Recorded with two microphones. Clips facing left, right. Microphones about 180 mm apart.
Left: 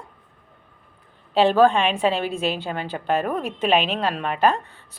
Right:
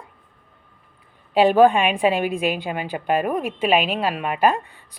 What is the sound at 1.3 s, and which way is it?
A woman's voice, 15° right (ahead or behind).